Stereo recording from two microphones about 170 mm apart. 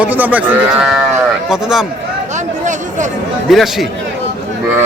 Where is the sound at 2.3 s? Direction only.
45° right (ahead or behind).